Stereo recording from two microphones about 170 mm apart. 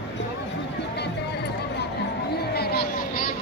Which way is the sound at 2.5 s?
65° left (ahead or behind).